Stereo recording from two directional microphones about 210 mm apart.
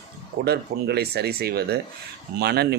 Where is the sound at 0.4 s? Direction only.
50° right (ahead or behind).